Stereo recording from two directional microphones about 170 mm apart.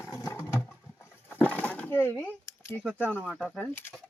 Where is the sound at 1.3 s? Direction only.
10° left (ahead or behind).